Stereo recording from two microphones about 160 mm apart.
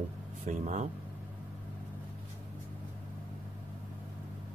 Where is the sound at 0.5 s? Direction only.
50° right (ahead or behind).